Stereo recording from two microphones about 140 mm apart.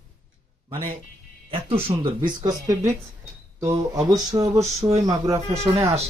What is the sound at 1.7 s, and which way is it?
Speech, 45° right (ahead or behind).